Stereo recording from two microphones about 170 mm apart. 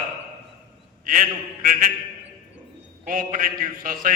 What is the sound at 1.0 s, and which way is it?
Speech, 55° right (ahead or behind).